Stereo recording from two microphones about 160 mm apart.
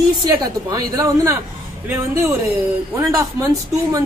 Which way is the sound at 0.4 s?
25° right (ahead or behind).